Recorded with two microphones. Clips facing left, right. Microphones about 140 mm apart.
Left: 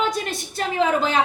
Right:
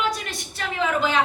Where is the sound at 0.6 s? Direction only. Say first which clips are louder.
Left 3 dB; 35° left (ahead or behind).